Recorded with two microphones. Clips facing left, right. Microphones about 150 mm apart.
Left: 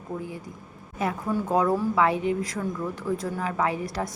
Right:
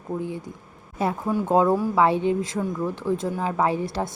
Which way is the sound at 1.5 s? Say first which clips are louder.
Right 4 dB; 25° right (ahead or behind).